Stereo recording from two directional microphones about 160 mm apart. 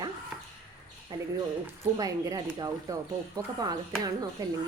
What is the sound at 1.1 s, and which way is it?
Speech, 25° right (ahead or behind).